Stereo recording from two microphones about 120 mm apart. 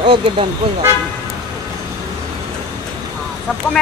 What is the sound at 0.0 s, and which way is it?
Speech, 45° right (ahead or behind).